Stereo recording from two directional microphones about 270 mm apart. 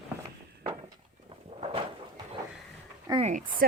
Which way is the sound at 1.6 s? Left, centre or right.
Right.